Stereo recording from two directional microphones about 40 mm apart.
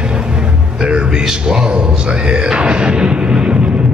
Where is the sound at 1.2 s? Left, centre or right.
Right.